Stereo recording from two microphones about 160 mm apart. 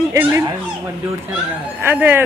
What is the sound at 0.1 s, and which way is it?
Speech, 20° right (ahead or behind).